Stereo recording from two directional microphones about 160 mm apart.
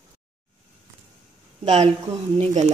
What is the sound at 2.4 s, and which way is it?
Speech, 45° right (ahead or behind).